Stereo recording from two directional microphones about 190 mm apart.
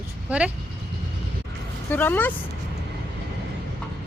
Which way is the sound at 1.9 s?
10° left (ahead or behind).